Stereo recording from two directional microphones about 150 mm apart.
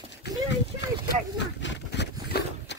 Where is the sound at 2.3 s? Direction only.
90° left.